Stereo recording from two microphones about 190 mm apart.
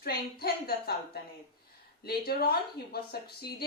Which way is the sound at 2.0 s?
55° left (ahead or behind).